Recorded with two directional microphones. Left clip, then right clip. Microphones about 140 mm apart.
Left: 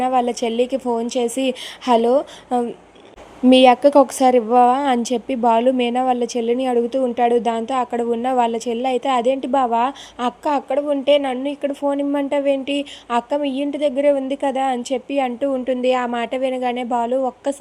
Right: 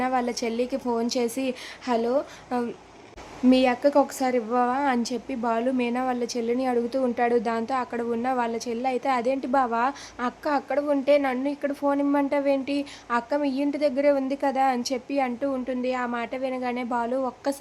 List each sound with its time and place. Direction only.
0.0 s a woman's voice: 25° left (ahead or behind)
1.5 s a woman's voice: 35° left (ahead or behind); by 17.6 s 20° left (ahead or behind)